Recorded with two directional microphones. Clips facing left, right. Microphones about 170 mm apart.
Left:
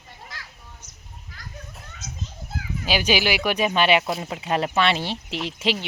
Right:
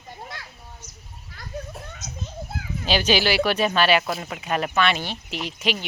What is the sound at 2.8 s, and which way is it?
Speech, 10° left (ahead or behind).